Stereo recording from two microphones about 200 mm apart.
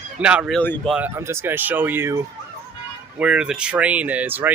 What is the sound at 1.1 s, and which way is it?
Speech, 15° right (ahead or behind).